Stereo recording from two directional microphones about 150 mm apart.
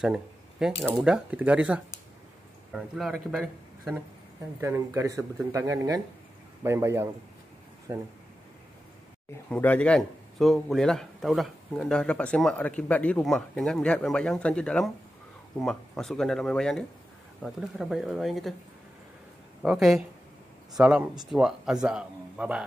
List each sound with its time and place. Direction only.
0.0 s a man's voice: 5° right (ahead or behind)
4.6 s speech: 15° right (ahead or behind)
9.5 s a man's voice: 10° left (ahead or behind)
19.6 s a man's voice: 5° right (ahead or behind)